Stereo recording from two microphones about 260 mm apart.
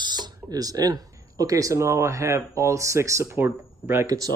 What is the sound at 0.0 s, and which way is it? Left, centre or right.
Speech, centre.